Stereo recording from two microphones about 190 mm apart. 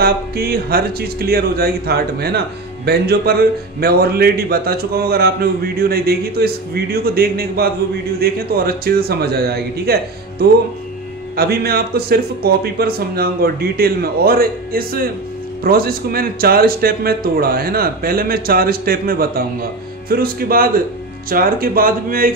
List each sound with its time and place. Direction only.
0.0 s speech: 55° right (ahead or behind)
11.3 s speech: 55° right (ahead or behind)